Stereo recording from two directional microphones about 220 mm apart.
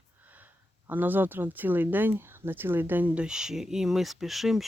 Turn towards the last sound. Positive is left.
turn(degrees=0)  # may be behind; listen again after turning